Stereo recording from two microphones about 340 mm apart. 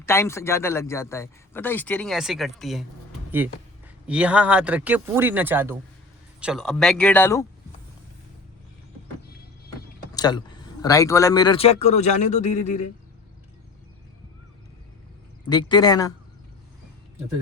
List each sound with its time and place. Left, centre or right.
0.0 s a man's voice: centre
10.2 s a man's voice: centre
15.4 s a man's voice: centre